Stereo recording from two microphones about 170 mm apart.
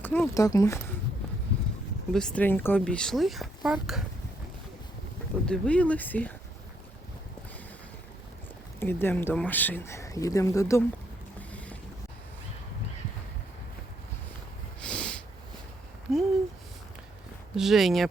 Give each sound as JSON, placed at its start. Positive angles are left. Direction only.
{"t": 0.0, "sound": "speech", "side_deg": 10}
{"t": 2.1, "sound": "speech", "side_deg": 5}
{"t": 5.5, "sound": "speech", "side_deg": 5}
{"t": 8.8, "sound": "speech", "side_deg": 15}
{"t": 11.3, "sound": "boat", "side_deg": 10}
{"t": 14.8, "sound": "snort", "side_deg": 5}
{"t": 16.1, "sound": "a sound", "side_deg": 0}
{"t": 17.5, "sound": "speech", "side_deg": 0}